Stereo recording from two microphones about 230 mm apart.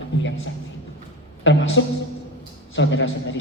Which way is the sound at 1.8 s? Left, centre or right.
Left.